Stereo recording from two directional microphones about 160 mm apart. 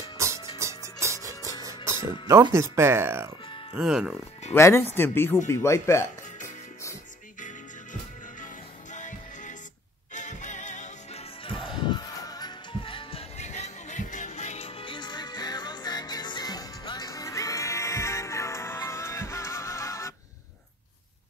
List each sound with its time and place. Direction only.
0.2 s music: 15° right (ahead or behind)
2.5 s speech: 15° right (ahead or behind)
3.7 s speech: 5° right (ahead or behind)
4.6 s speech: 15° left (ahead or behind)
5.5 s music: 15° left (ahead or behind)
7.3 s music: 55° left (ahead or behind)
11.7 s music: 30° left (ahead or behind)